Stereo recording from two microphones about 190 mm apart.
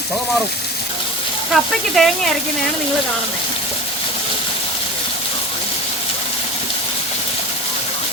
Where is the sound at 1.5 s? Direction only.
Centre (ahead or behind).